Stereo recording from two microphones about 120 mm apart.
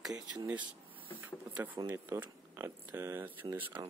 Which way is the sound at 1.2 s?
15° right (ahead or behind).